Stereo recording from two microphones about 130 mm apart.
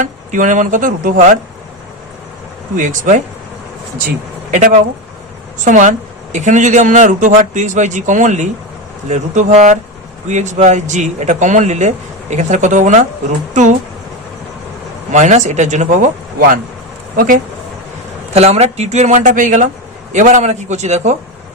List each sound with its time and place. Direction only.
0.0 s speech: 75° right (ahead or behind)
2.7 s speech: 75° right (ahead or behind)
4.5 s speech: 75° right (ahead or behind)
15.1 s speech: 65° right (ahead or behind)
17.2 s speech: 90° right
18.3 s speech: 55° right (ahead or behind)